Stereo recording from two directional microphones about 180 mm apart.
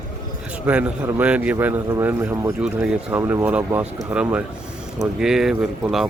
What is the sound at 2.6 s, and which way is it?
A man's voice, 5° right (ahead or behind).